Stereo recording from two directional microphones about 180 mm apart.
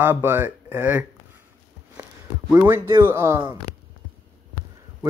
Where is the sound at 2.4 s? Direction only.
10° right (ahead or behind).